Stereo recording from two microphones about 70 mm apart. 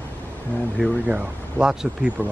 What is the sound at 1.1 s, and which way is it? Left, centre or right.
Speech, right.